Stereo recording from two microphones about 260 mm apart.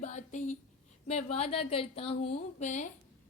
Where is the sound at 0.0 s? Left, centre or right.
Left.